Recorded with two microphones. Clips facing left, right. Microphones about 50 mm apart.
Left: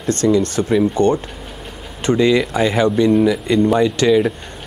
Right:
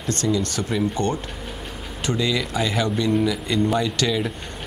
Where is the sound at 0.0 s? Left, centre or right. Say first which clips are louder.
Left 8 dB; left.